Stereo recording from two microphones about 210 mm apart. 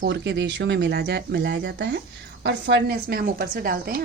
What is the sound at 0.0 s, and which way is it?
A woman's voice, 55° right (ahead or behind).